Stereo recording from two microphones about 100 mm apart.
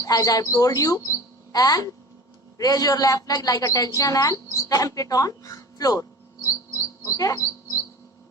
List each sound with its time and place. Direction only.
0.0 s a woman's voice: 35° left (ahead or behind)
7.0 s bird: 35° left (ahead or behind)